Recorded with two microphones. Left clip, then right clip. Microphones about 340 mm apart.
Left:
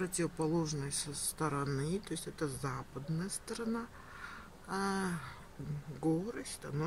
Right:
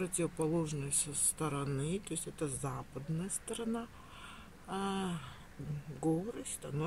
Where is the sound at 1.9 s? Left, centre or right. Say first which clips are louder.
Left 1 dB; centre.